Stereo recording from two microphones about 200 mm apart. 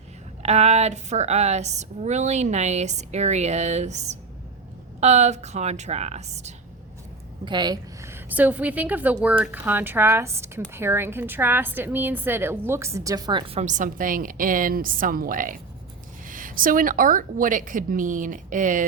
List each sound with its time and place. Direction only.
0.4 s a woman's voice: 30° right (ahead or behind)
7.4 s a woman's voice: 20° right (ahead or behind)
13.6 s a woman's voice: 40° right (ahead or behind)